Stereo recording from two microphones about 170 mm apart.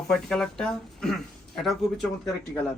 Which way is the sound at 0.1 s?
5° left (ahead or behind).